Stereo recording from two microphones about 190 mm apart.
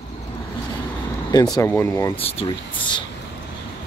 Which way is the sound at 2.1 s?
30° left (ahead or behind).